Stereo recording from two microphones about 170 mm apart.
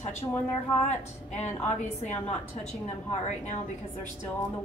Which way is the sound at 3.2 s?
40° left (ahead or behind).